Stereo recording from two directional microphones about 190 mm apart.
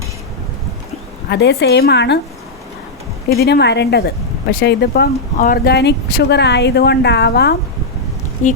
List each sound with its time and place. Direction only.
1.3 s speech: 65° left (ahead or behind)
3.2 s speech: 60° left (ahead or behind)
8.4 s speech: 40° left (ahead or behind)